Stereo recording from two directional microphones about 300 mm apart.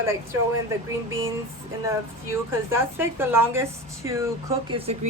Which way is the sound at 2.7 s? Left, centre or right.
Centre.